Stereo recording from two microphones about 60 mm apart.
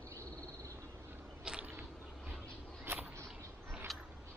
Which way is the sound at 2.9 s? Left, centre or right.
Right.